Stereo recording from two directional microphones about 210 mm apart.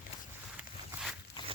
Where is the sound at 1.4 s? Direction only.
20° left (ahead or behind).